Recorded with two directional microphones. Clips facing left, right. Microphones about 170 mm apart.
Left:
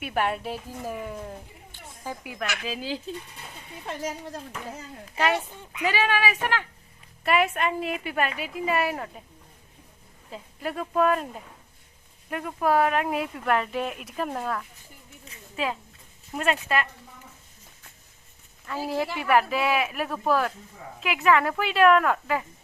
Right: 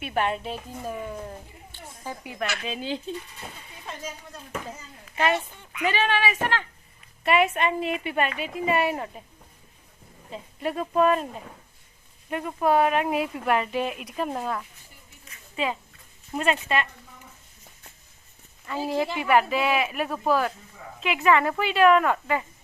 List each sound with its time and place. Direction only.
0.0 s speech: 10° left (ahead or behind)
3.8 s speech: 75° left (ahead or behind)
5.1 s speech: 5° left (ahead or behind)
10.3 s speech: centre (ahead or behind)
12.3 s speech: centre (ahead or behind)
18.9 s speech: centre (ahead or behind)